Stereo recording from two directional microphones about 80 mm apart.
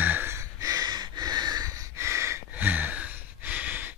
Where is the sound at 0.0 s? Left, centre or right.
Right.